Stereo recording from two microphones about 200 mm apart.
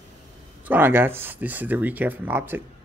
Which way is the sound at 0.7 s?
10° right (ahead or behind).